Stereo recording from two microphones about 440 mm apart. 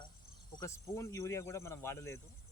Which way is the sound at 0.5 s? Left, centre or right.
Centre.